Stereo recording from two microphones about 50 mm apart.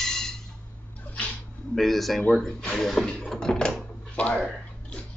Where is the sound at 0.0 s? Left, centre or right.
Centre.